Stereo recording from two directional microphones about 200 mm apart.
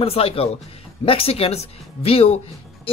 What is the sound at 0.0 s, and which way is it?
Speech, 30° left (ahead or behind).